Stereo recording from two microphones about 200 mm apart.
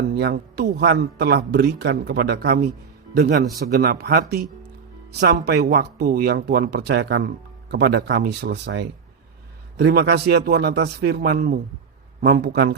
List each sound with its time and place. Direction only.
0.1 s a man's voice: 55° right (ahead or behind)